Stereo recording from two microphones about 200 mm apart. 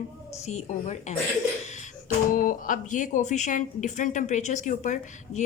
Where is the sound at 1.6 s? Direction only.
35° left (ahead or behind).